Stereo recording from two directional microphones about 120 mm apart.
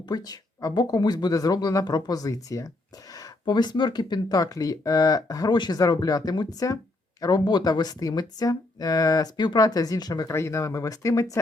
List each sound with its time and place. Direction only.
0.1 s speech: 35° left (ahead or behind)